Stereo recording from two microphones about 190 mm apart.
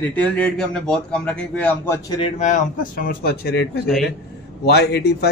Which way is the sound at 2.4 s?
45° left (ahead or behind).